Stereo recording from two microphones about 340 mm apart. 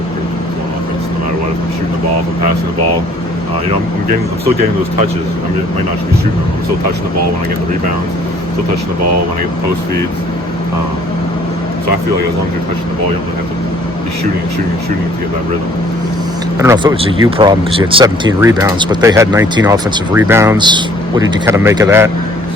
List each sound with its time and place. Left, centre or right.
16.6 s speech: centre